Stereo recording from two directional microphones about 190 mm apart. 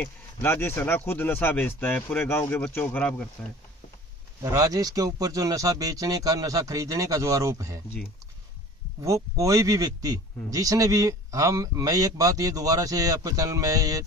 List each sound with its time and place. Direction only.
0.0 s speech: 10° left (ahead or behind)
4.4 s speech: 15° right (ahead or behind)
9.0 s speech: 15° right (ahead or behind)